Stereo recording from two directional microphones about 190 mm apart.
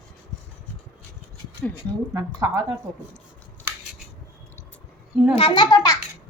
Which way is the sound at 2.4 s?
15° right (ahead or behind).